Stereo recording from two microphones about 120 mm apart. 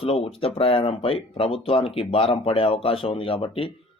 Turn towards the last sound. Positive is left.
turn(degrees=50)  # may be behind; listen again after turning